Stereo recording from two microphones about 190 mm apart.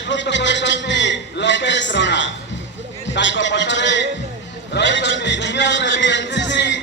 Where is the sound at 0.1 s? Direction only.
70° left (ahead or behind).